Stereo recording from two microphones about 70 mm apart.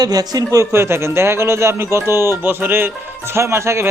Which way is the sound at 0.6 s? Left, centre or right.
Right.